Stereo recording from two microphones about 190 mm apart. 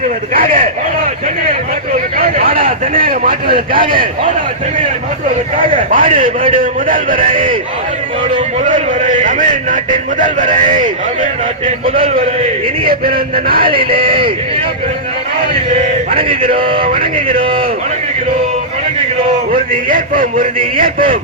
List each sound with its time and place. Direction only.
0.3 s a man's voice: 45° right (ahead or behind)
2.1 s a sound: 50° right (ahead or behind)
5.5 s a man's voice: 45° right (ahead or behind)
8.6 s a man's voice: 45° right (ahead or behind)
14.0 s a man's voice: 25° right (ahead or behind)
16.1 s a man's voice: 30° right (ahead or behind)
19.7 s a man's voice: 45° right (ahead or behind)